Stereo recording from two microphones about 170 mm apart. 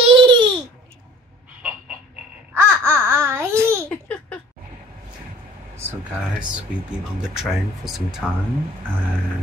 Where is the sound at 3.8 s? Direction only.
5° left (ahead or behind).